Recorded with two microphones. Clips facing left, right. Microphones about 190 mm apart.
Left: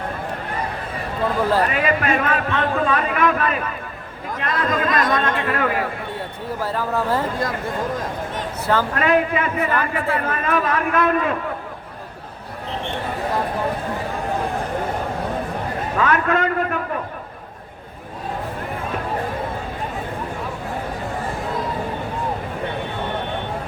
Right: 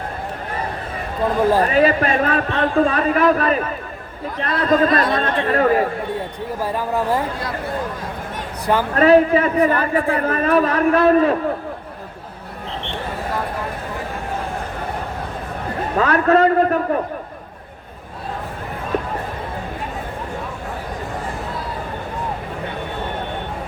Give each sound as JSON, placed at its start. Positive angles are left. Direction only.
{"t": 1.6, "sound": "a man's voice", "side_deg": -35}
{"t": 4.4, "sound": "a man's voice", "side_deg": 45}
{"t": 4.7, "sound": "a man's voice", "side_deg": -35}
{"t": 5.0, "sound": "a man's voice", "side_deg": 45}
{"t": 5.3, "sound": "a man's voice", "side_deg": -35}
{"t": 6.6, "sound": "speech", "side_deg": -15}
{"t": 9.0, "sound": "a man's voice", "side_deg": -35}
{"t": 16.0, "sound": "a man's voice", "side_deg": -35}